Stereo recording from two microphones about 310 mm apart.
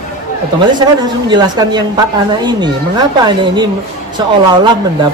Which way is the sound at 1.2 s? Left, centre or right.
Centre.